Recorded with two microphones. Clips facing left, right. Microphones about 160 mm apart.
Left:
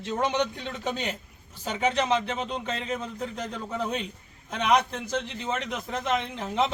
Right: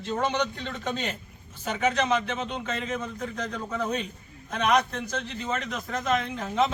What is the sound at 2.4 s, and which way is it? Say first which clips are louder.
A man's voice: even; 30° left (ahead or behind).